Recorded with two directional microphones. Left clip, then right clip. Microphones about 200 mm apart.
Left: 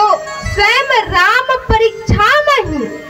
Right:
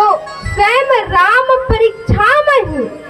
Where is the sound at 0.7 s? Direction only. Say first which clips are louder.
Even; 20° left (ahead or behind).